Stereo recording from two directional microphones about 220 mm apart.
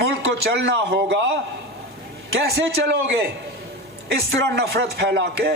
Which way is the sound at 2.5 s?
45° right (ahead or behind).